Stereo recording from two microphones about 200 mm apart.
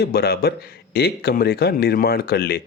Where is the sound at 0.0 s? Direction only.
50° left (ahead or behind).